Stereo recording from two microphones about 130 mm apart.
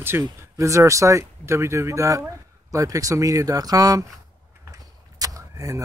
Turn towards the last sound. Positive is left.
turn(degrees=-25)  # may be behind; listen again after turning